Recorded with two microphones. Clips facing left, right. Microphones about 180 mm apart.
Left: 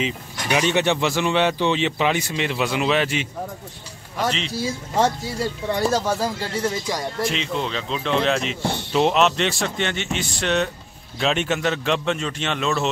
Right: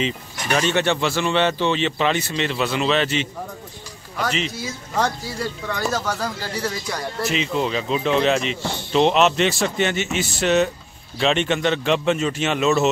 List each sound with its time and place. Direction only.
0.0 s speech: 10° left (ahead or behind)
4.5 s speech: 30° left (ahead or behind)
7.2 s speech: 5° right (ahead or behind)